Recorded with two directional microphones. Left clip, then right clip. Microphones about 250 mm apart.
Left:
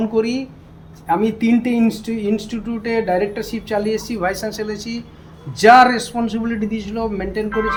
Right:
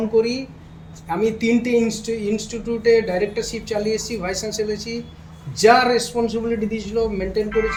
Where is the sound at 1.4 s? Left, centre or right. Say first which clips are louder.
Even; centre.